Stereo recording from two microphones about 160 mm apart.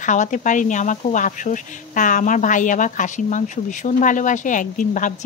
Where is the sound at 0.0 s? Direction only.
50° left (ahead or behind).